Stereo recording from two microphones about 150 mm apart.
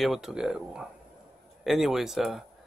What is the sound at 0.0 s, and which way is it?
Speech, 5° right (ahead or behind).